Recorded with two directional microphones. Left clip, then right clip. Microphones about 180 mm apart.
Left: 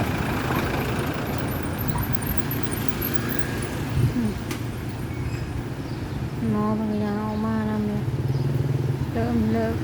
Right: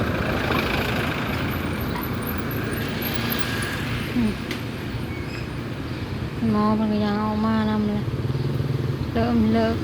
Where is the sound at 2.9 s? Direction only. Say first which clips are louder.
Right 3 dB; 60° left (ahead or behind).